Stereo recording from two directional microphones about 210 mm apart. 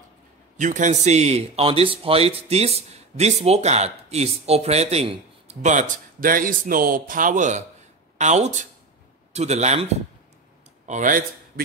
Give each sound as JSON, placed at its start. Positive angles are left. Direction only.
{"t": 0.6, "sound": "speech", "side_deg": -35}
{"t": 10.9, "sound": "speech", "side_deg": -40}